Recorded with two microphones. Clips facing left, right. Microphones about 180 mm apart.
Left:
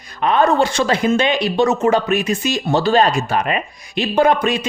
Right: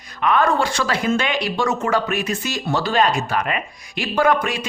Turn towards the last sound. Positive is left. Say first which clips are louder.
# left 3 dB
turn(degrees=25)  # may be behind; listen again after turning